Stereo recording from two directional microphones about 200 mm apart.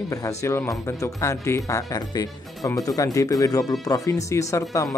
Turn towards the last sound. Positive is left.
turn(degrees=15)  # may be behind; listen again after turning